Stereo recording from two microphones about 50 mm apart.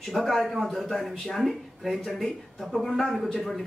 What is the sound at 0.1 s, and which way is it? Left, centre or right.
A man's voice, centre.